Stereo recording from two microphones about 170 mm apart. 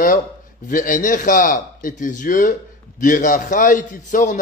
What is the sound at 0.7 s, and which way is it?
A man's voice, 55° left (ahead or behind).